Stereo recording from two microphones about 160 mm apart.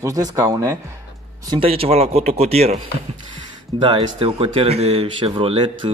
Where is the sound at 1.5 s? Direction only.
35° right (ahead or behind).